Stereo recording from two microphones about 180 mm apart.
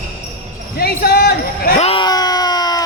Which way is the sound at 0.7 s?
60° left (ahead or behind).